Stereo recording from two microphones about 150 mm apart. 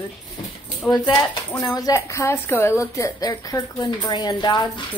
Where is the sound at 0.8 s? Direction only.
30° left (ahead or behind).